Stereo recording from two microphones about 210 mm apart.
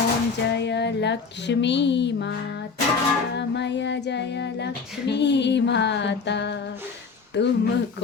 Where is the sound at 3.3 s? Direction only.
55° left (ahead or behind).